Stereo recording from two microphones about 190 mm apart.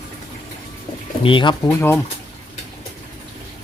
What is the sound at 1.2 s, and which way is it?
Speech, 25° left (ahead or behind).